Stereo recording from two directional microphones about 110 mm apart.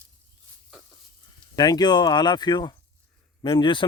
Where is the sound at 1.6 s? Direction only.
40° left (ahead or behind).